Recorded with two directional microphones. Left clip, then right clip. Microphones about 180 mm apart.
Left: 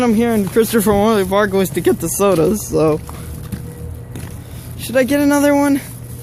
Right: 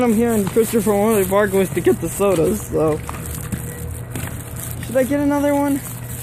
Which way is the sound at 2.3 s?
45° left (ahead or behind).